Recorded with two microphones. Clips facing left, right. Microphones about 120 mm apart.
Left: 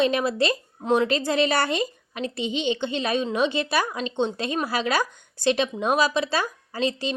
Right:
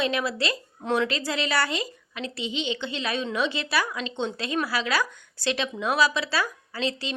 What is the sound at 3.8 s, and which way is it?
Speech, 40° left (ahead or behind).